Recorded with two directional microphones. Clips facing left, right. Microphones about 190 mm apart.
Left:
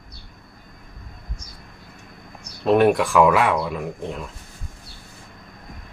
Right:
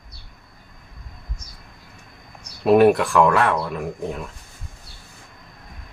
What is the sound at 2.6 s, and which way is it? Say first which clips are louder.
Speech: right 2 dB; 5° right (ahead or behind).